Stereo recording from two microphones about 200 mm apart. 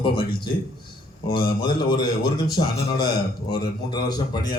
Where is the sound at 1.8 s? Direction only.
20° left (ahead or behind).